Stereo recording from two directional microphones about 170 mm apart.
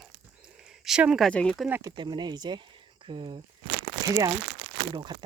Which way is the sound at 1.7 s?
20° right (ahead or behind).